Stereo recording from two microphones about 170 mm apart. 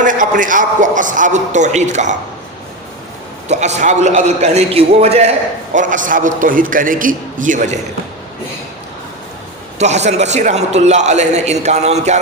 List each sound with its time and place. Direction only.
0.0 s a man's voice: 50° right (ahead or behind)
3.5 s a man's voice: 45° right (ahead or behind)
9.7 s a man's voice: 40° right (ahead or behind)